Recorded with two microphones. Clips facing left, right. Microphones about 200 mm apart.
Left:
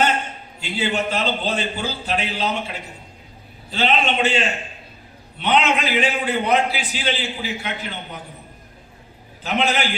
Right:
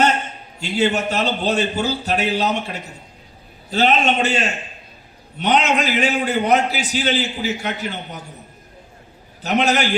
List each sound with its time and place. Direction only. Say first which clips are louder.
0.8 s a man's voice: right 4 dB; 45° right (ahead or behind)
9.4 s a man's voice: right 3 dB; 45° right (ahead or behind)